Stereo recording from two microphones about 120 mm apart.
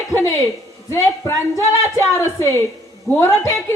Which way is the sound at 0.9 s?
25° left (ahead or behind).